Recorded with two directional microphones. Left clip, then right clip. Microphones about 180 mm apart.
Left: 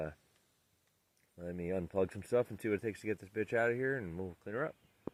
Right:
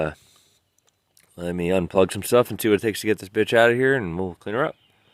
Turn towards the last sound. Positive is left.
turn(degrees=-20)  # may be behind; listen again after turning